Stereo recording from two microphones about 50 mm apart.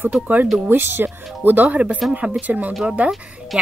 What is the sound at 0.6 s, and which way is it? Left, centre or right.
Speech, right.